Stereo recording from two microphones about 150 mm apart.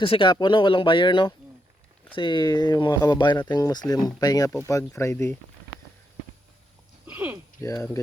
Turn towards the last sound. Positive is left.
turn(degrees=20)  # may be behind; listen again after turning